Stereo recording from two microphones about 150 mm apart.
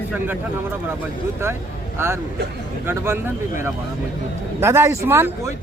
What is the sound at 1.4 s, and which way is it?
Speech, 15° right (ahead or behind).